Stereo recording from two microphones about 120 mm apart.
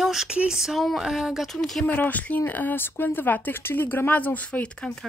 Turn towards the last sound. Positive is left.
turn(degrees=5)  # may be behind; listen again after turning